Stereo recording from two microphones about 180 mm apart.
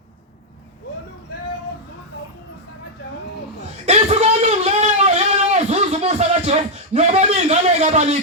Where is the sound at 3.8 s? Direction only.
35° right (ahead or behind).